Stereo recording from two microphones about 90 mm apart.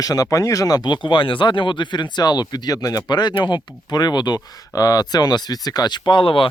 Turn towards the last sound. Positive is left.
turn(degrees=75)  # may be behind; listen again after turning